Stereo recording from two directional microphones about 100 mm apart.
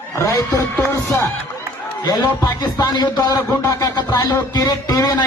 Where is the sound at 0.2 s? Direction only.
35° left (ahead or behind).